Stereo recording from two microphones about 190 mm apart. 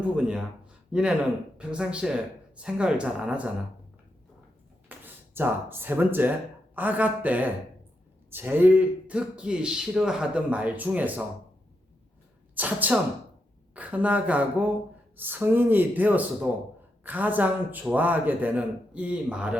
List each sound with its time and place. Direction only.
0.2 s speech: 5° right (ahead or behind)
4.9 s a man's voice: 10° right (ahead or behind)
12.5 s a man's voice: 10° right (ahead or behind)